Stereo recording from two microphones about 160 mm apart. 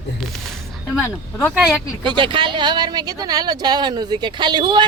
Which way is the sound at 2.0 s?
30° right (ahead or behind).